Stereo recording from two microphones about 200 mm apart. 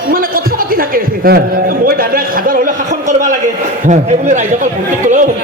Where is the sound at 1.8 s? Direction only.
45° right (ahead or behind).